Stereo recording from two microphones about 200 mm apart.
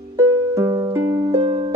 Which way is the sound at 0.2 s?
15° right (ahead or behind).